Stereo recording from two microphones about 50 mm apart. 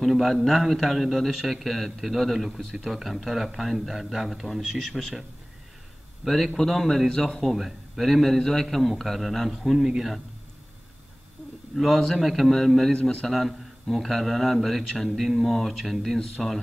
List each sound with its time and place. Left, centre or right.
0.0 s speech: centre
6.2 s speech: centre
7.5 s speech: centre
9.6 s speech: centre
11.7 s a man's voice: centre
12.9 s a man's voice: centre
13.3 s speech: centre